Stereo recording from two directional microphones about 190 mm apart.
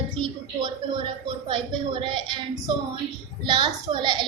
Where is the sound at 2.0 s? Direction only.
25° right (ahead or behind).